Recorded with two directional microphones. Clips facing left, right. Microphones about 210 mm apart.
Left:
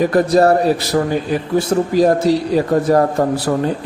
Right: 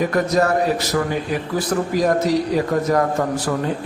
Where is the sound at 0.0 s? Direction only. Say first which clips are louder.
Left 6 dB; 35° left (ahead or behind).